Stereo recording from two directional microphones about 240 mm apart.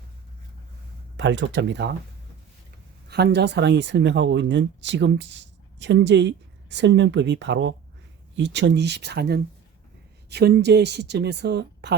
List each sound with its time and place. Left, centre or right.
1.1 s speech: right
3.1 s speech: right